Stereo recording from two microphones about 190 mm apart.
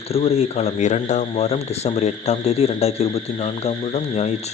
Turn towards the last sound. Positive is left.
turn(degrees=35)  # may be behind; listen again after turning